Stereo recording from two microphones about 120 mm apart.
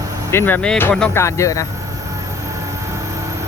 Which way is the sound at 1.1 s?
25° left (ahead or behind).